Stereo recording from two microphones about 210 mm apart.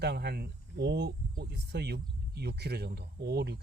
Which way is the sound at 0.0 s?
50° right (ahead or behind).